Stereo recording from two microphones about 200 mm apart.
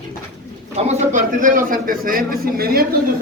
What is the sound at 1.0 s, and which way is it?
Speech, 40° right (ahead or behind).